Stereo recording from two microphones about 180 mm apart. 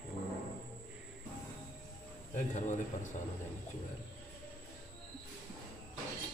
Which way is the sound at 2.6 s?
40° left (ahead or behind).